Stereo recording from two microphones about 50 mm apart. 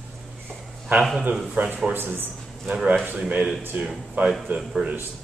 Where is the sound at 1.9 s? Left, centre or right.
Right.